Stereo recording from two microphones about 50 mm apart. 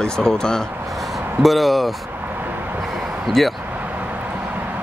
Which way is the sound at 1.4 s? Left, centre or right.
Centre.